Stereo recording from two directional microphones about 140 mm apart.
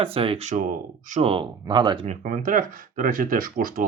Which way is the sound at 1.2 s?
40° right (ahead or behind).